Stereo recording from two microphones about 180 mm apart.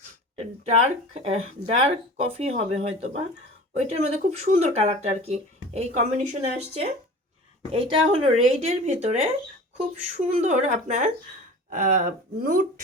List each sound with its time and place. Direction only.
1.1 s speech: 35° right (ahead or behind)
7.7 s speech: 35° right (ahead or behind)